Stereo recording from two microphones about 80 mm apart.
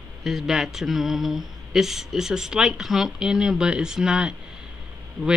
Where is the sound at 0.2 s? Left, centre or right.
Centre.